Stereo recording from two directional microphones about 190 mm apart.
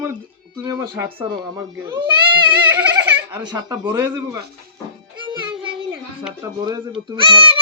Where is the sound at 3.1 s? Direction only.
10° right (ahead or behind).